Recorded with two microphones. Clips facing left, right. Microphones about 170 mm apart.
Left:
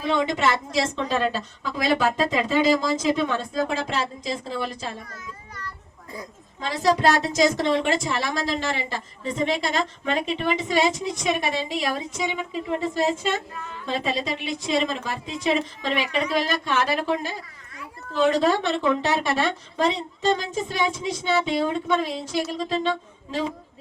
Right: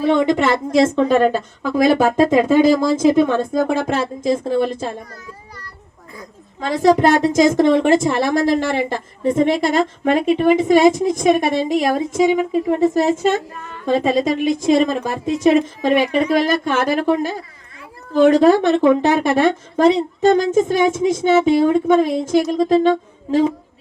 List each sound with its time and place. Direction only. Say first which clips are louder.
0.0 s a woman's voice: right 7 dB; 55° right (ahead or behind)
6.6 s a woman's voice: right 8 dB; 50° right (ahead or behind)